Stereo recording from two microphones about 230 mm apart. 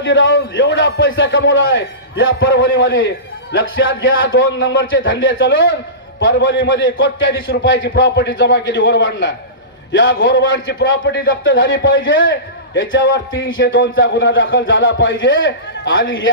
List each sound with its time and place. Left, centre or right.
0.0 s a man's voice: left